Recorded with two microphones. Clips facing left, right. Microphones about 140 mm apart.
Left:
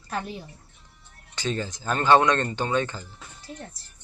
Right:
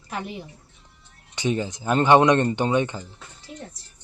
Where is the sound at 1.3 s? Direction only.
15° right (ahead or behind).